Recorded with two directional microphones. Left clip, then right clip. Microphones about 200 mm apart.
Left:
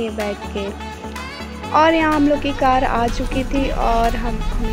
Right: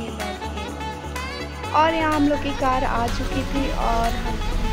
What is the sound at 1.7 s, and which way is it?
Speech, 20° left (ahead or behind).